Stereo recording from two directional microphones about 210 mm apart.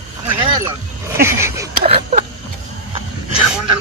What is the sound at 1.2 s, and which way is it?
Speech, 10° right (ahead or behind).